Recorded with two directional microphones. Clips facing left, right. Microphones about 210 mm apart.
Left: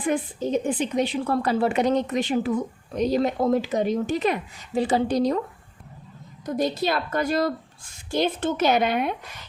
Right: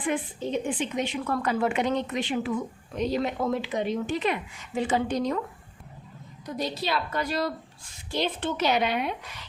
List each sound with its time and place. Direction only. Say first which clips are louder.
0.0 s a woman's voice: left 4 dB; 40° left (ahead or behind)
6.4 s a woman's voice: left 6 dB; 45° left (ahead or behind)